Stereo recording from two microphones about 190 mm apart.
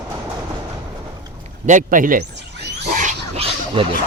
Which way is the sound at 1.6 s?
45° right (ahead or behind).